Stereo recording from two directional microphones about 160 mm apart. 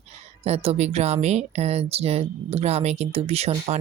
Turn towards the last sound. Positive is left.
turn(degrees=-40)  # may be behind; listen again after turning